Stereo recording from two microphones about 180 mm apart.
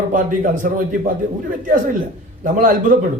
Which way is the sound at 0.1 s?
45° right (ahead or behind).